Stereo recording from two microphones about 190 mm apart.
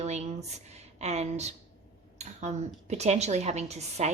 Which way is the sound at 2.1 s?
35° right (ahead or behind).